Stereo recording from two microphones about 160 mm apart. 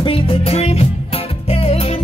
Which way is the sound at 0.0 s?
35° left (ahead or behind).